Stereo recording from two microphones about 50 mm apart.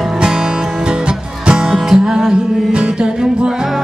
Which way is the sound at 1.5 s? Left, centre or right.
Centre.